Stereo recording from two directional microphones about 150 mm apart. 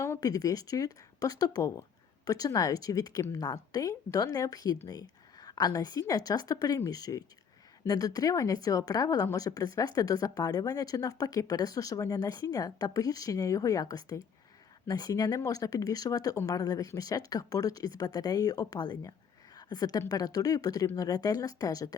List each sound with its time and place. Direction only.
0.0 s speech: 20° left (ahead or behind)